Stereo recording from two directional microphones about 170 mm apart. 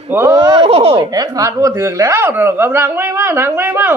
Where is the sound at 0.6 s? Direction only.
35° right (ahead or behind).